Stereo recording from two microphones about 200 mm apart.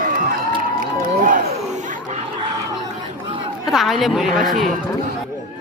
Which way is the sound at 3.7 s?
Centre (ahead or behind).